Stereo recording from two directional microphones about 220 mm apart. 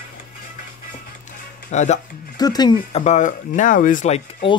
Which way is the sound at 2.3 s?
20° left (ahead or behind).